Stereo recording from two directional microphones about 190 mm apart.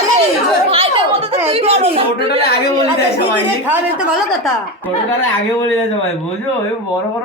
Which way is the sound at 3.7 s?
5° right (ahead or behind).